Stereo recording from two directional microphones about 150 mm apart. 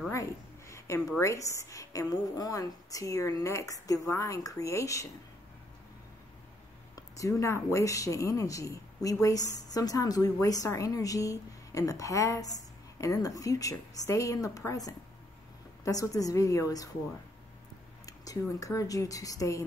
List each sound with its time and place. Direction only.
0.1 s a woman's voice: 20° left (ahead or behind)
7.0 s a woman's voice: 20° left (ahead or behind)
18.0 s a woman's voice: 25° left (ahead or behind)